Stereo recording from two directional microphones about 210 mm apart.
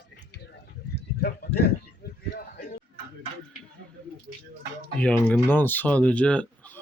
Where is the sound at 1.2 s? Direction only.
45° left (ahead or behind).